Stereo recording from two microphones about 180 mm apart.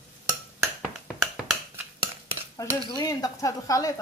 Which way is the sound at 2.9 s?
20° left (ahead or behind).